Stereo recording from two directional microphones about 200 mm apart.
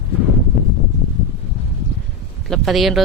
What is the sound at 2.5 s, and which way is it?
Speech, centre (ahead or behind).